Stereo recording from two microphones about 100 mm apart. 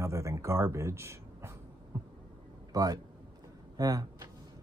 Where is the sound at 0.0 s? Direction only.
30° right (ahead or behind).